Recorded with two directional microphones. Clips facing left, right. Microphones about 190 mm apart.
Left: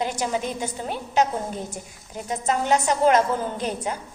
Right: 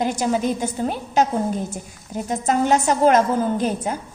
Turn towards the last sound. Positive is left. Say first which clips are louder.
# right 5 dB
turn(degrees=-45)  # may be behind; listen again after turning